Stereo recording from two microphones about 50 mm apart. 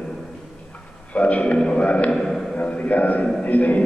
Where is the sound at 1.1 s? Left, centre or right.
Left.